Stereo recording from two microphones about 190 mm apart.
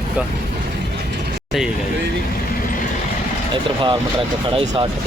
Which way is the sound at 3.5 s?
25° right (ahead or behind).